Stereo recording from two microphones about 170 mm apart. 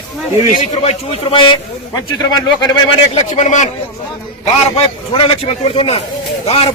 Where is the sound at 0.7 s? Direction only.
40° left (ahead or behind); by 2.6 s 20° left (ahead or behind).